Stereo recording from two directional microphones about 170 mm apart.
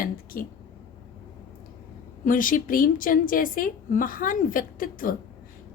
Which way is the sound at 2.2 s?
55° left (ahead or behind).